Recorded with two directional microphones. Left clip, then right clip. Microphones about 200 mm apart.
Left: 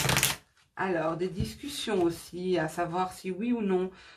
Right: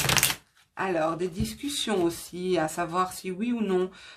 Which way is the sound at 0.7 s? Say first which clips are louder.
Right 3 dB; 45° right (ahead or behind).